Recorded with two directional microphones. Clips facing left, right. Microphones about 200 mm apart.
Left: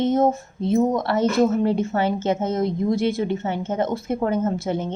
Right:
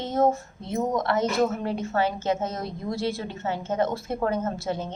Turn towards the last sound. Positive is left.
turn(degrees=20)  # may be behind; listen again after turning